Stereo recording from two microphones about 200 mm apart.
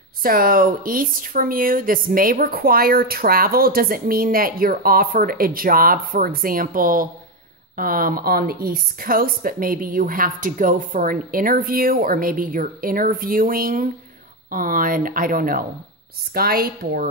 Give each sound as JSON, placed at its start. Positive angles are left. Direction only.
{"t": 0.2, "sound": "speech", "side_deg": -45}